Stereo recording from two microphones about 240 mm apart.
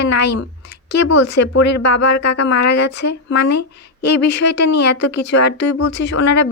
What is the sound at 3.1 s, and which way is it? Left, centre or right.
A woman's voice, left.